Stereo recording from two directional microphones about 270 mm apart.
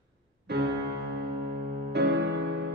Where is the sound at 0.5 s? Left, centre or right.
Right.